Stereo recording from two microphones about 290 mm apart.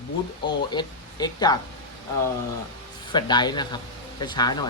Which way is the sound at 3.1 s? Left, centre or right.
Centre.